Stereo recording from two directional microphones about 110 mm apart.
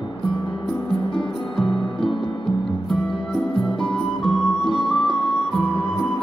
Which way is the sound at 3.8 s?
5° left (ahead or behind).